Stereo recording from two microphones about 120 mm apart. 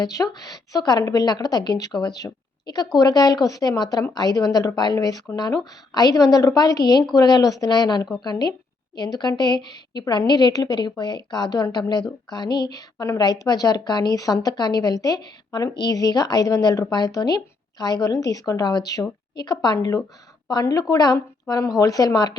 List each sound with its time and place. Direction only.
0.0 s a woman's voice: 30° left (ahead or behind)